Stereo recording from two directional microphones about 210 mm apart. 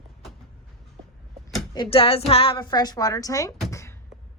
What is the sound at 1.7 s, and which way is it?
A woman's voice, 25° left (ahead or behind).